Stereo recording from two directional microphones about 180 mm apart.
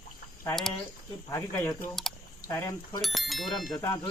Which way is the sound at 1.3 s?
15° left (ahead or behind).